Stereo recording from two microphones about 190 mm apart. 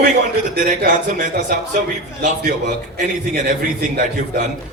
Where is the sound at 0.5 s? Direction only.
45° right (ahead or behind).